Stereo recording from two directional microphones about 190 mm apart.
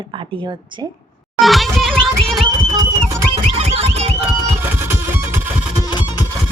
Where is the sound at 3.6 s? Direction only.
35° right (ahead or behind).